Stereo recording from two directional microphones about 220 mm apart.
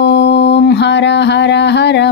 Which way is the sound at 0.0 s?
50° left (ahead or behind).